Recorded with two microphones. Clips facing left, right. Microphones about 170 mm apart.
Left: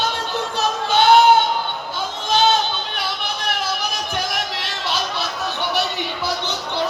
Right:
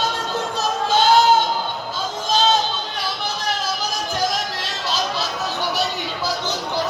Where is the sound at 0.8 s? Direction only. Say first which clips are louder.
Left 2 dB; 65° left (ahead or behind).